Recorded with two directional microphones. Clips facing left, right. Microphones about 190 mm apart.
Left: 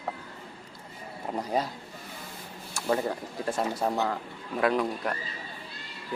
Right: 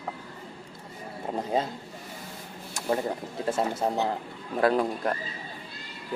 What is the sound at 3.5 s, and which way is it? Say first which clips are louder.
Speech: right 2 dB; 25° right (ahead or behind).